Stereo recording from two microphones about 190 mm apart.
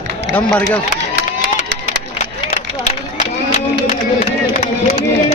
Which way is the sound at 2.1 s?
35° left (ahead or behind).